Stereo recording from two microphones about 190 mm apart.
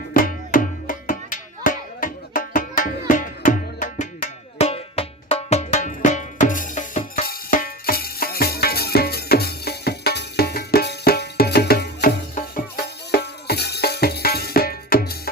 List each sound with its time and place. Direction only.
0.1 s music: 45° left (ahead or behind)